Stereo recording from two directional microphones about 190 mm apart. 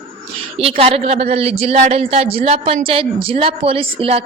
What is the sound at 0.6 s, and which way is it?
Speech, 30° right (ahead or behind).